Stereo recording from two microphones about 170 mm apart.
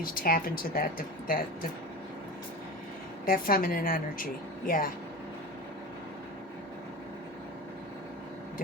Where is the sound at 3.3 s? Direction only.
60° left (ahead or behind).